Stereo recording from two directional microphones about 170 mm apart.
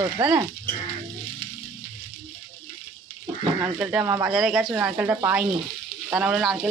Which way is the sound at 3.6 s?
5° right (ahead or behind).